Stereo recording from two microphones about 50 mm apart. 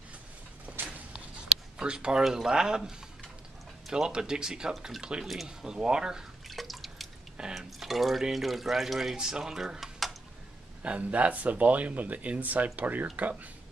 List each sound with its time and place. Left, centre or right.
0.7 s a sound: right
1.8 s speech: centre
3.9 s speech: centre
5.3 s speech: centre
5.7 s speech: centre
6.5 s drip: centre
7.5 s speech: centre
10.8 s speech: right